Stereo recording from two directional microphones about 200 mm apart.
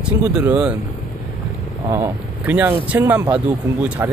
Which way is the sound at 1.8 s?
10° right (ahead or behind).